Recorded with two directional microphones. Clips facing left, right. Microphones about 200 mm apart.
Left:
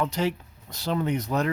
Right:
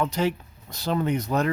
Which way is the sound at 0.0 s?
50° right (ahead or behind).